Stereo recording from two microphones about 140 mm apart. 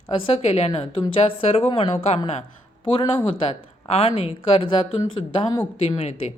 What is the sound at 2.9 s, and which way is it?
Speech, 35° left (ahead or behind).